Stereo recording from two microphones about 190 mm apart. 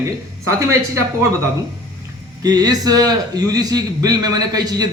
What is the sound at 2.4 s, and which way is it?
A man's voice, 20° right (ahead or behind).